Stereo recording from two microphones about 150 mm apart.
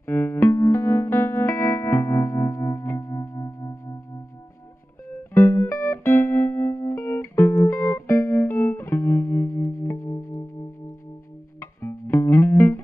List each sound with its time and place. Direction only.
0.0 s music: 15° left (ahead or behind)
11.6 s music: 15° left (ahead or behind)